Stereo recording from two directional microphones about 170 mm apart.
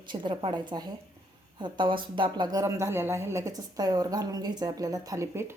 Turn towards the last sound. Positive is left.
turn(degrees=-15)  # may be behind; listen again after turning